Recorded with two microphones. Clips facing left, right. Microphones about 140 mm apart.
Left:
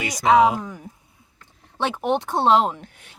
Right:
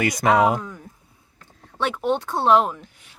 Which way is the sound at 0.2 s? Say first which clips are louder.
Left 3 dB; 55° right (ahead or behind).